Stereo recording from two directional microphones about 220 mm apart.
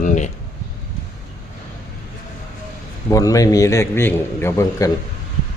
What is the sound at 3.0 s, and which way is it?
A man's voice, 15° left (ahead or behind).